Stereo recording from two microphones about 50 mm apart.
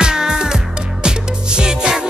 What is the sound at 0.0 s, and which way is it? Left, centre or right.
Music, centre.